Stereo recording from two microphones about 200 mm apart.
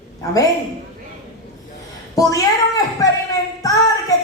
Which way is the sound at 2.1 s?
15° left (ahead or behind).